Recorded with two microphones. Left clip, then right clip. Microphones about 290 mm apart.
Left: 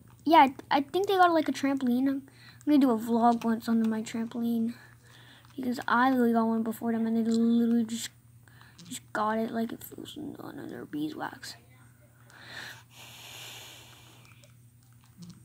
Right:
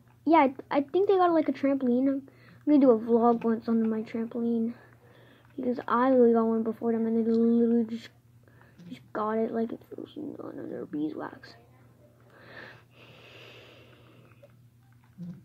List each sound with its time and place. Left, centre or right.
0.2 s speech: left
12.4 s wheeze: left